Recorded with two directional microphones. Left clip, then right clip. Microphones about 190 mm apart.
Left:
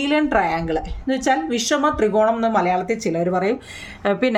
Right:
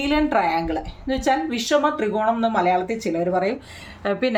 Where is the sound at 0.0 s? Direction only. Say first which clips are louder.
Left 1 dB; 25° left (ahead or behind).